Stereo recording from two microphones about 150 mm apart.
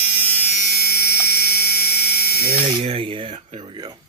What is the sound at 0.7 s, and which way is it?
Electric toothbrush, 90° left.